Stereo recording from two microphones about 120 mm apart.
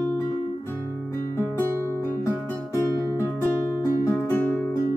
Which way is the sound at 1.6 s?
20° right (ahead or behind).